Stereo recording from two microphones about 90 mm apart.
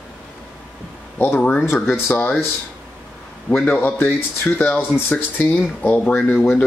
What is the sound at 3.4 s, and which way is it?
Speech, 15° left (ahead or behind).